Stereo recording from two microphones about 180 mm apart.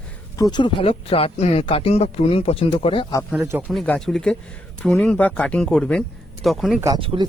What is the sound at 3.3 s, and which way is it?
Speech, 10° right (ahead or behind).